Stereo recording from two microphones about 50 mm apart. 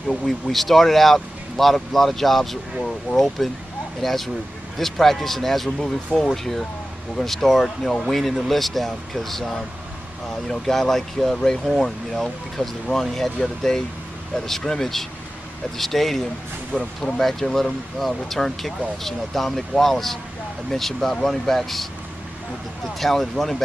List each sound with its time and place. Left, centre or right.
0.1 s speech: centre
3.1 s speech: right
4.0 s speech: centre
16.7 s speech: centre
17.2 s speech: centre
22.9 s speech: centre